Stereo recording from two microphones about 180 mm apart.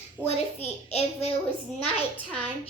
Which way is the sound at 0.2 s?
15° right (ahead or behind).